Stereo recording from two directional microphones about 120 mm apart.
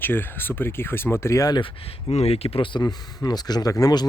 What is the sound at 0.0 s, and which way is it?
Speech, 15° left (ahead or behind).